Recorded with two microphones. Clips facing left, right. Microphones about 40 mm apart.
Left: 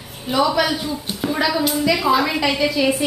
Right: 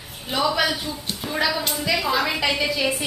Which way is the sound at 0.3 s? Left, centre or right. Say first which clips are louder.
Left 4 dB; centre.